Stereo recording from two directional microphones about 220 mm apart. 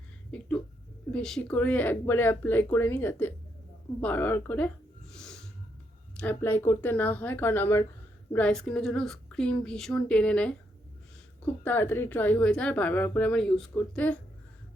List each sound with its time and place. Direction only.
0.3 s a woman's voice: 5° left (ahead or behind)
5.1 s snort: 5° left (ahead or behind)
6.1 s a woman's voice: 10° left (ahead or behind)
11.6 s speech: 10° left (ahead or behind)